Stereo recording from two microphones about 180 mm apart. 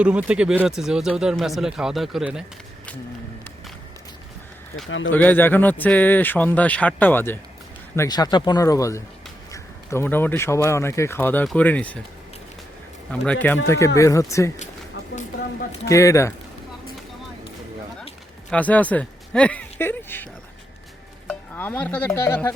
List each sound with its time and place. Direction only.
0.0 s speech: 5° right (ahead or behind)
4.9 s speech: 90° left
5.1 s speech: 10° left (ahead or behind)
13.1 s speech: 5° left (ahead or behind)
15.9 s speech: 15° left (ahead or behind)
18.5 s speech: 10° left (ahead or behind)
21.2 s stir: 10° left (ahead or behind)